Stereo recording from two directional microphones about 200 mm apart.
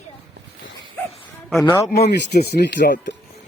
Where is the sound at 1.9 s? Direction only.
55° left (ahead or behind).